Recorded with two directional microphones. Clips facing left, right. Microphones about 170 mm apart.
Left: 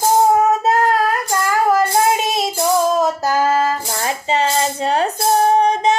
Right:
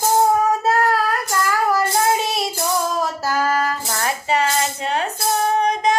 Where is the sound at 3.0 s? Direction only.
20° left (ahead or behind).